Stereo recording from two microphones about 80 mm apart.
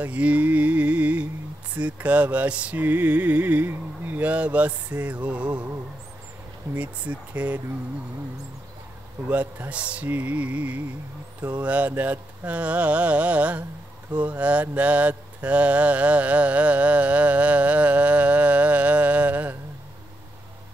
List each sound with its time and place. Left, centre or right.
0.0 s music: centre
1.8 s mantra: centre
6.7 s speech: centre
9.3 s speech: centre
11.4 s mantra: centre